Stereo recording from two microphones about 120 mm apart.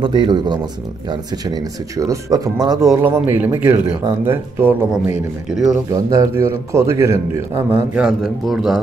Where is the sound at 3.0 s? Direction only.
15° right (ahead or behind).